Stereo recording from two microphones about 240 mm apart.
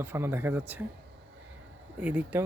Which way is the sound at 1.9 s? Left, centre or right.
Centre.